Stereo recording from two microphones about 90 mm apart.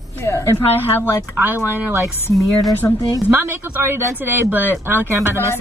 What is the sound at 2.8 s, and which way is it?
Speech, 20° left (ahead or behind).